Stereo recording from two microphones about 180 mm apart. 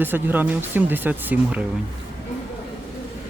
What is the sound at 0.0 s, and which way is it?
Speech, 10° right (ahead or behind).